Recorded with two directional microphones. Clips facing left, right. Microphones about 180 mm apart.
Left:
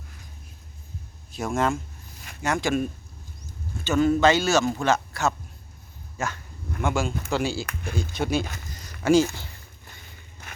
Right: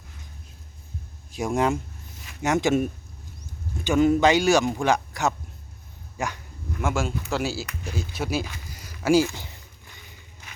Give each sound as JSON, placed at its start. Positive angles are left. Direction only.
{"t": 1.3, "sound": "speech", "side_deg": -15}
{"t": 6.8, "sound": "speech", "side_deg": 0}
{"t": 9.3, "sound": "speech", "side_deg": -20}